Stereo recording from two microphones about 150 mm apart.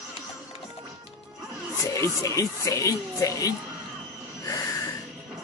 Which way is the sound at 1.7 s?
20° left (ahead or behind).